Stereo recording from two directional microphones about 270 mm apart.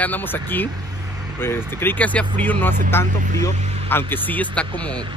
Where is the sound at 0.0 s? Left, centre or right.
Centre.